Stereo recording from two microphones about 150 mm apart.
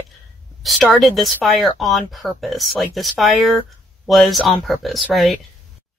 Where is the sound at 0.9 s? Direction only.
Centre (ahead or behind).